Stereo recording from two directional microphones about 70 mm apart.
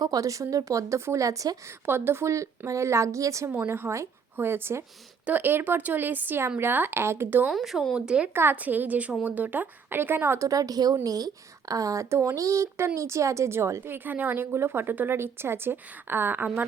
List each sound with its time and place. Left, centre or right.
0.0 s a woman's voice: right
1.9 s a woman's voice: right
3.7 s speech: right
4.4 s speech: right
7.5 s speech: centre
7.9 s speech: centre
8.3 s speech: right
11.7 s speech: right